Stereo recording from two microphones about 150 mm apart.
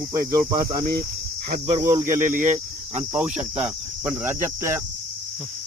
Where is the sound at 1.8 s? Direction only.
15° right (ahead or behind).